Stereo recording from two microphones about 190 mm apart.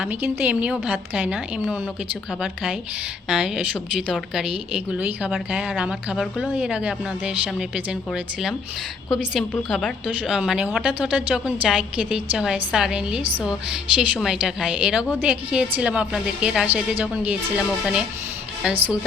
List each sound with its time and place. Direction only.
0.0 s a woman's voice: 10° right (ahead or behind)
3.2 s a woman's voice: 5° right (ahead or behind)
18.6 s a woman's voice: 5° right (ahead or behind)